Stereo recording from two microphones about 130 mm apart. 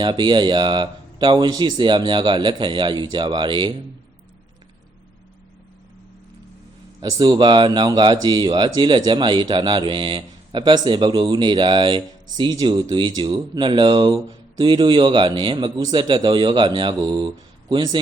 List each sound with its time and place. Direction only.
0.0 s speech: 35° right (ahead or behind)
7.0 s speech: 30° right (ahead or behind)